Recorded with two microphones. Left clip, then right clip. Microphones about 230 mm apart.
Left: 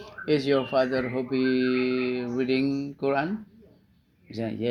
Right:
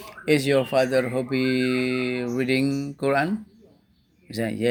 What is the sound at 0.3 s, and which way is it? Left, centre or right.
Speech, right.